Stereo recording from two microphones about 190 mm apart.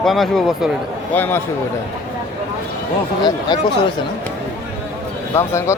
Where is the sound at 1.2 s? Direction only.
10° left (ahead or behind).